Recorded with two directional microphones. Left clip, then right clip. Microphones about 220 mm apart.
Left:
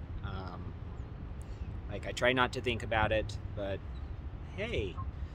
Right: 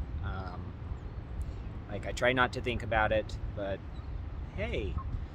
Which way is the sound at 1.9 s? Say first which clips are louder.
Right 1 dB; 10° left (ahead or behind).